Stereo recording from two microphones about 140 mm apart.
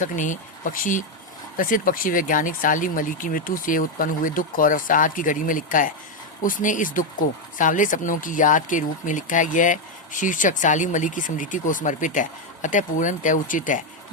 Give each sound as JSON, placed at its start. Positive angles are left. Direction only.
{"t": 0.0, "sound": "speech", "side_deg": 65}